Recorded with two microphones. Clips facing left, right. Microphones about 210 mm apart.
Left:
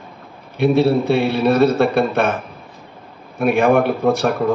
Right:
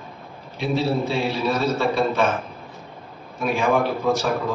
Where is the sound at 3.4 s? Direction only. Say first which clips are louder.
Left 6 dB; 60° left (ahead or behind).